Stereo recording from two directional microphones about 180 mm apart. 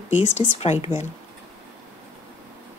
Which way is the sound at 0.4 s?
35° left (ahead or behind).